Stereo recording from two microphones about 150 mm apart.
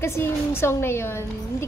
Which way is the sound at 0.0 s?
15° left (ahead or behind).